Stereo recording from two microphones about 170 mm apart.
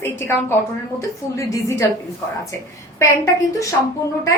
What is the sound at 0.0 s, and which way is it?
A woman's voice, 15° left (ahead or behind).